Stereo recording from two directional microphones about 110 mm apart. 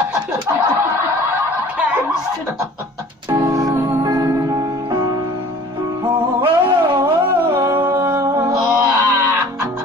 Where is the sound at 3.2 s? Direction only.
25° right (ahead or behind).